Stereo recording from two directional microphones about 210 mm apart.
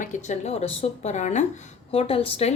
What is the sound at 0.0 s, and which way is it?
Speech, 35° left (ahead or behind).